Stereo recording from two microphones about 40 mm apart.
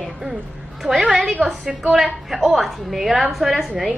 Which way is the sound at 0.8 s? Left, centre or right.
Right.